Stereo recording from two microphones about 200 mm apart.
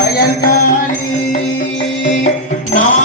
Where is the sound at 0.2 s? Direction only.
45° left (ahead or behind).